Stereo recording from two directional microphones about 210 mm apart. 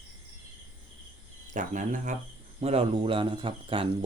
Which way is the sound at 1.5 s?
35° right (ahead or behind).